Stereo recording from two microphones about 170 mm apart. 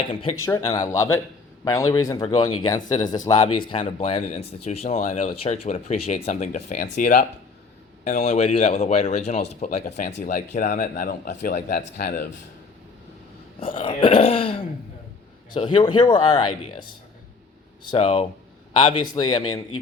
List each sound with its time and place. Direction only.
0.1 s speech: 30° left (ahead or behind)
0.4 s a man's voice: 20° left (ahead or behind); by 11.8 s 50° left (ahead or behind)
11.8 s speech: 65° left (ahead or behind)
13.7 s speech: 30° left (ahead or behind)
17.9 s speech: 35° left (ahead or behind)